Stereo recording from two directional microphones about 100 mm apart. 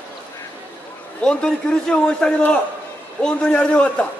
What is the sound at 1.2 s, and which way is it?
A man's voice, 10° left (ahead or behind).